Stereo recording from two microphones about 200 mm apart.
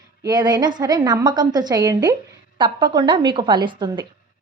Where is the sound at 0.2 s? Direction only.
20° right (ahead or behind).